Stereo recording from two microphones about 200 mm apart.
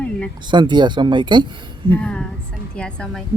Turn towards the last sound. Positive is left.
turn(degrees=5)  # may be behind; listen again after turning